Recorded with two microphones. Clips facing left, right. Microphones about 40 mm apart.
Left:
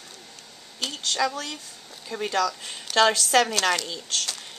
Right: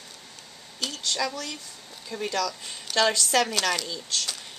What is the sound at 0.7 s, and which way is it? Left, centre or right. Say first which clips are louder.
Speech: left 2 dB; centre.